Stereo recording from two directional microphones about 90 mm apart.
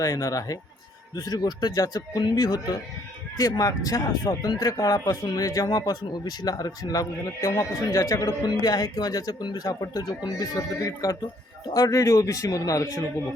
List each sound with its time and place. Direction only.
0.0 s speech: 40° left (ahead or behind)